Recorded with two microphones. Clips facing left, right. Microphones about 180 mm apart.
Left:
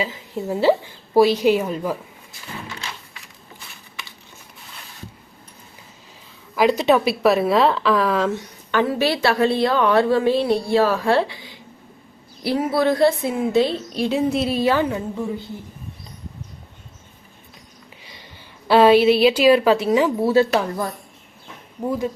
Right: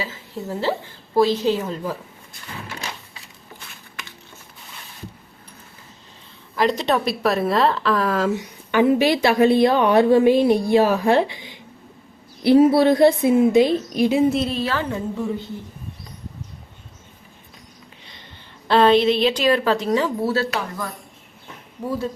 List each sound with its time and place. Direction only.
0.0 s a woman's voice: 15° left (ahead or behind)
6.6 s a woman's voice: 5° left (ahead or behind)
14.3 s a woman's voice: 10° left (ahead or behind)
18.7 s a woman's voice: 10° left (ahead or behind)
21.8 s a woman's voice: 15° left (ahead or behind)